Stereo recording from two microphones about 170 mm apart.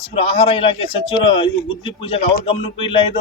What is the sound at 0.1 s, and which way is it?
A man's voice, 35° left (ahead or behind).